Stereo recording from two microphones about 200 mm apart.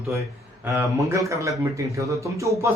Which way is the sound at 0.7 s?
15° right (ahead or behind).